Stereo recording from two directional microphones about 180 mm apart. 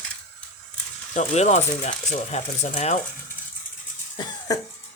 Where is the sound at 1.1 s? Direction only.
40° left (ahead or behind).